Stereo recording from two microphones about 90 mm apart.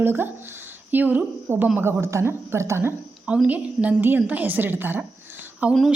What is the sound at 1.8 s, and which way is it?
Speech, 30° right (ahead or behind).